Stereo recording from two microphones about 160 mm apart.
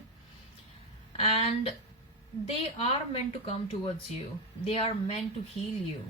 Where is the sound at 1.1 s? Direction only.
35° left (ahead or behind).